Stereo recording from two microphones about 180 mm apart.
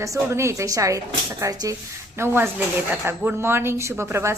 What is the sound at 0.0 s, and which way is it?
Speech, 15° right (ahead or behind).